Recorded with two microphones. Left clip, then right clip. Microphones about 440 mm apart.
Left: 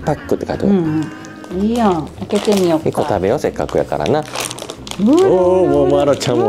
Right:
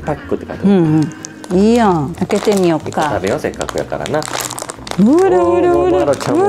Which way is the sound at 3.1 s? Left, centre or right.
Left.